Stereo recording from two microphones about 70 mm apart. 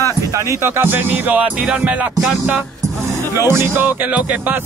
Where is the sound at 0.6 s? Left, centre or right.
Right.